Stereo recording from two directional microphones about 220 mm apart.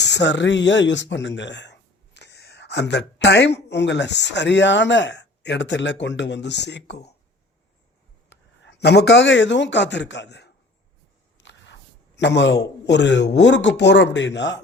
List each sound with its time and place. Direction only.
0.0 s speech: 50° left (ahead or behind)
8.3 s a man's voice: 50° left (ahead or behind)
11.3 s a sound: 55° left (ahead or behind)
12.8 s speech: 50° left (ahead or behind)